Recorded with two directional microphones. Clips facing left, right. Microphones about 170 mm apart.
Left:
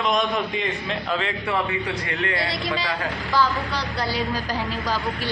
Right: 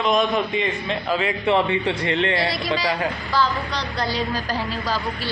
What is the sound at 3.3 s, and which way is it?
A woman's voice, 10° left (ahead or behind).